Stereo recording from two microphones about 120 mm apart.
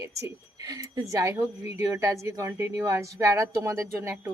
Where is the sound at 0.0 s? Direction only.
25° right (ahead or behind).